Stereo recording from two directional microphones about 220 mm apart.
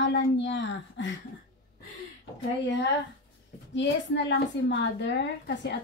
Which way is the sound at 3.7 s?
55° left (ahead or behind).